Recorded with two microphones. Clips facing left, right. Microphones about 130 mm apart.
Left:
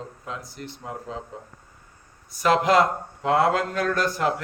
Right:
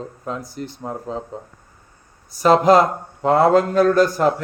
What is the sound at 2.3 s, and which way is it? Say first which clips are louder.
Speech: right 6 dB; 35° right (ahead or behind).